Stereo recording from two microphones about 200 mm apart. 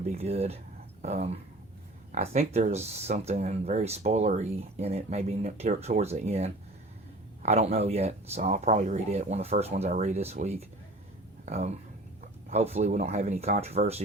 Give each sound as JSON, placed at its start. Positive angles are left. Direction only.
{"t": 0.0, "sound": "speech", "side_deg": -30}